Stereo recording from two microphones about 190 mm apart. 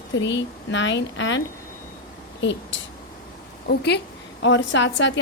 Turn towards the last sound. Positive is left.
turn(degrees=70)  # may be behind; listen again after turning